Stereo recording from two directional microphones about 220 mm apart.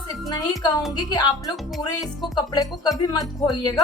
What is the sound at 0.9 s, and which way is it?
Speech, 20° left (ahead or behind).